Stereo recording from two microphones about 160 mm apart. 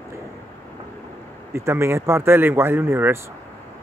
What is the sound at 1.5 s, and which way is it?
Speech, 15° right (ahead or behind).